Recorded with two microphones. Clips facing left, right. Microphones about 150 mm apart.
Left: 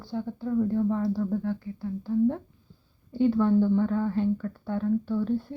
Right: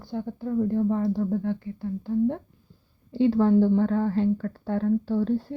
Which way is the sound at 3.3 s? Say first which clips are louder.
Right 3 dB; 35° right (ahead or behind).